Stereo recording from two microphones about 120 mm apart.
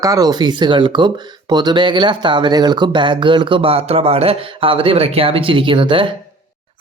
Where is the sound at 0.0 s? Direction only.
30° right (ahead or behind).